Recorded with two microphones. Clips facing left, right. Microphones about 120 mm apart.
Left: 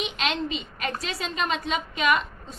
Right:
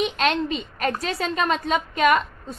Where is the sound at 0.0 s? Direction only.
45° right (ahead or behind).